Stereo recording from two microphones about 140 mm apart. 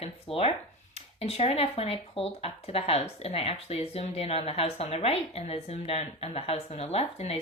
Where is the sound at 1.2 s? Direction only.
45° left (ahead or behind).